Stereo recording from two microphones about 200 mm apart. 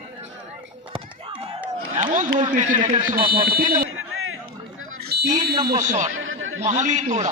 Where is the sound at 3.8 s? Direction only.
90° right.